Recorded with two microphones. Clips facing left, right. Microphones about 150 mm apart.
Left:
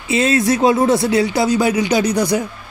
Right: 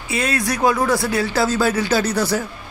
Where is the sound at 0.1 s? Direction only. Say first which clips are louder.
Left 7 dB; 25° left (ahead or behind).